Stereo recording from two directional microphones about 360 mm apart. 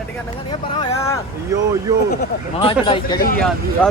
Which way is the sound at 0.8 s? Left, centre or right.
Centre.